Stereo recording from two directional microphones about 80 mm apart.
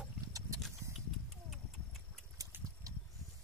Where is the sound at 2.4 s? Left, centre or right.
Right.